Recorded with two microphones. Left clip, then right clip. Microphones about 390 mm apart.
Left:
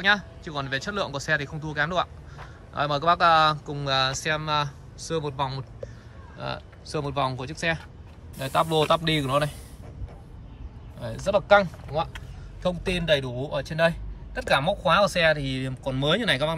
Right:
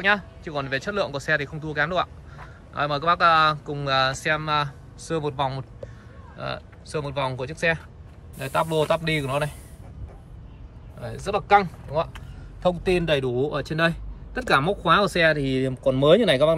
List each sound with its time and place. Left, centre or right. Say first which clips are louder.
0.0 s speech: right 1 dB; centre
11.0 s speech: left 3 dB; centre